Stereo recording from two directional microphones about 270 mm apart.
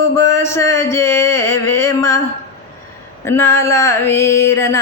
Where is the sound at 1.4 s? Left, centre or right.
Left.